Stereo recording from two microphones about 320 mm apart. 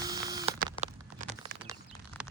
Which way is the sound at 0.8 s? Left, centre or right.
Centre.